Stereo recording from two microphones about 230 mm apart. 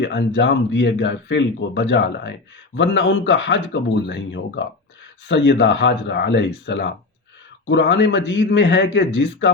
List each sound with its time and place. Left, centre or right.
0.0 s speech: left